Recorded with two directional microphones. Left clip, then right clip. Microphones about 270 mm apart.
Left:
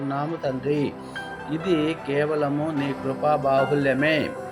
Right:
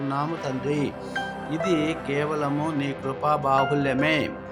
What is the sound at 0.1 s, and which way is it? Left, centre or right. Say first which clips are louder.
Speech: left 2 dB; centre.